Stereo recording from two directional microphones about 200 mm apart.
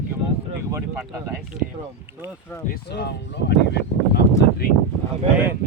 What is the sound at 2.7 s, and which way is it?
Speech, 55° left (ahead or behind).